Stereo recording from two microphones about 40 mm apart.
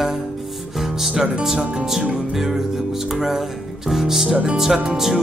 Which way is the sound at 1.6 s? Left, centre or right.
Right.